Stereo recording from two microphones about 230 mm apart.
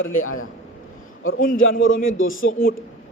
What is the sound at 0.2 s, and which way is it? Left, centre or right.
Speech, left.